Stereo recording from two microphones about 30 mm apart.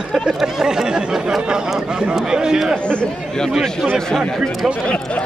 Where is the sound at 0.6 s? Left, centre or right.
Centre.